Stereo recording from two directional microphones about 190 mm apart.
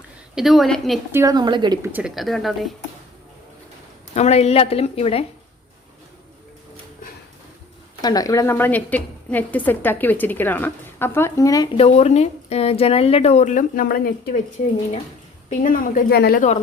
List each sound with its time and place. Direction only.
0.3 s speech: centre (ahead or behind)
1.1 s speech: 15° right (ahead or behind)
1.9 s speech: 5° right (ahead or behind)
4.1 s a woman's voice: 35° left (ahead or behind)
8.0 s a woman's voice: 20° left (ahead or behind)
11.8 s a woman's voice: 35° left (ahead or behind); by 14.4 s 50° left (ahead or behind)
15.4 s a woman's voice: 45° left (ahead or behind)